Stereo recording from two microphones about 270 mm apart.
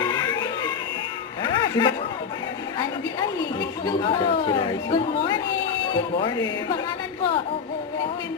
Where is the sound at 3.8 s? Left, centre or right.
Centre.